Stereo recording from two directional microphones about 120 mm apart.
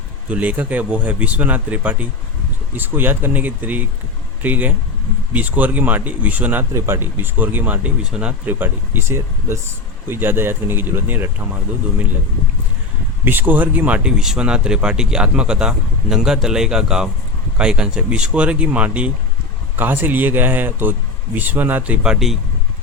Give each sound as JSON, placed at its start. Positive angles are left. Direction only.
{"t": 0.3, "sound": "speech", "side_deg": -10}
{"t": 13.2, "sound": "speech", "side_deg": -15}
{"t": 22.0, "sound": "speech", "side_deg": -5}